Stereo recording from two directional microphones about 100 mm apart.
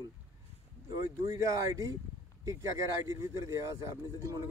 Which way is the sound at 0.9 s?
35° right (ahead or behind).